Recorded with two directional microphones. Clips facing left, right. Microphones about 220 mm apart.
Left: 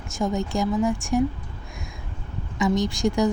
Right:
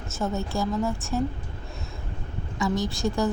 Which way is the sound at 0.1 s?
15° left (ahead or behind).